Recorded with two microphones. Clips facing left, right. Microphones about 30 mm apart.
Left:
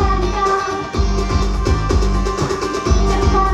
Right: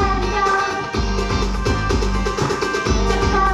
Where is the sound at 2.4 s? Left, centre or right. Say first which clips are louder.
Right 1 dB; centre.